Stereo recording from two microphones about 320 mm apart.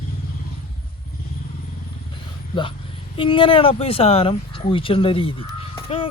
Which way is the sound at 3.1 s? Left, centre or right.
Centre.